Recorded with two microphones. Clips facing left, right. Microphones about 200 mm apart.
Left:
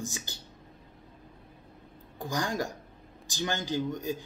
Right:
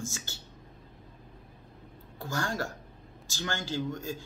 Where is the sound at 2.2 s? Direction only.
15° left (ahead or behind).